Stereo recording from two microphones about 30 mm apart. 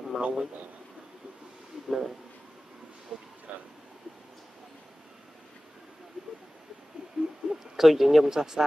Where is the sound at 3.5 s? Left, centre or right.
Right.